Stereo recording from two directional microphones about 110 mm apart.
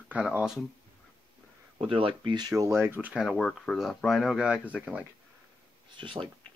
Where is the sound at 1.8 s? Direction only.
55° right (ahead or behind); by 3.1 s 20° right (ahead or behind).